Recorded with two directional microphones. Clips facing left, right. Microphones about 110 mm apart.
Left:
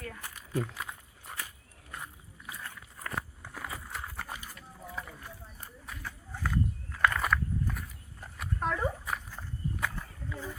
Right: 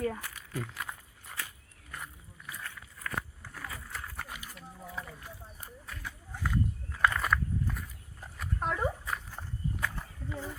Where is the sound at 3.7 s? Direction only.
25° left (ahead or behind).